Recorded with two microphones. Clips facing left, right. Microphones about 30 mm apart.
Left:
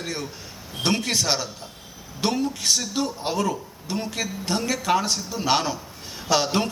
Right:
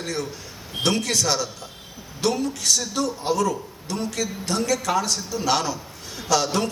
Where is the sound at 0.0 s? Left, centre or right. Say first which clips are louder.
Right 2 dB; left.